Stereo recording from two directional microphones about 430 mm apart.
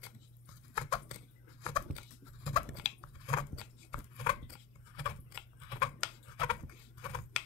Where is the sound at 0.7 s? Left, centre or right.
Centre.